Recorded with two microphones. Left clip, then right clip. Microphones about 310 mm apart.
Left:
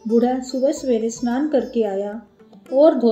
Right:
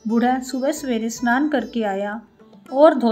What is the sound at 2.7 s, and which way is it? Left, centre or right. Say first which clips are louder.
Speech: even; right.